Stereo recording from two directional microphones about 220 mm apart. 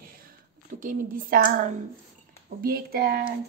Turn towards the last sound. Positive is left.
turn(degrees=-45)  # may be behind; listen again after turning